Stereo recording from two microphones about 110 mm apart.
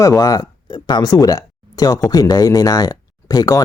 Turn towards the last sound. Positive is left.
turn(degrees=30)  # may be behind; listen again after turning